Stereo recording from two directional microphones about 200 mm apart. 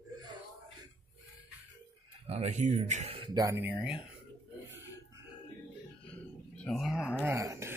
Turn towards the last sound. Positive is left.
turn(degrees=-15)  # may be behind; listen again after turning